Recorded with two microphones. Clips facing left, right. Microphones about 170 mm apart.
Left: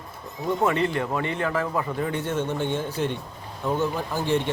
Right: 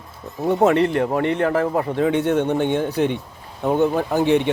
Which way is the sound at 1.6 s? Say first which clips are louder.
Right 6 dB; 50° right (ahead or behind).